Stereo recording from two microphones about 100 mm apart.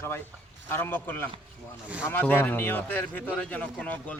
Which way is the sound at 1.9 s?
15° right (ahead or behind).